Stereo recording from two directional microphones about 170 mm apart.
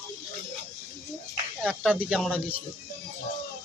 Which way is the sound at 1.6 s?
5° right (ahead or behind).